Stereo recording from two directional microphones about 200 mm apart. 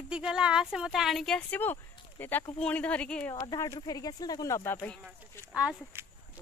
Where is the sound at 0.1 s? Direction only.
5° right (ahead or behind).